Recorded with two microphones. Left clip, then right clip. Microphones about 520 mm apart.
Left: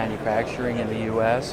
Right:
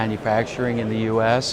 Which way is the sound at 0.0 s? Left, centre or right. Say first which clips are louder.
Right 3 dB; right.